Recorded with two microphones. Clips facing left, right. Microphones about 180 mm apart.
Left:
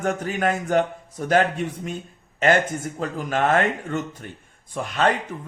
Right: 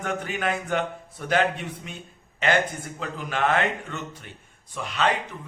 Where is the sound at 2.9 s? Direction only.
45° left (ahead or behind).